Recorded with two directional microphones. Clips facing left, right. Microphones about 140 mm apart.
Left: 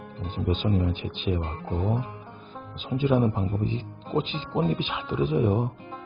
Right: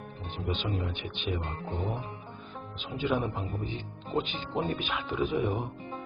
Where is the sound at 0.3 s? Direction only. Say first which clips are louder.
Left 7 dB; 35° left (ahead or behind).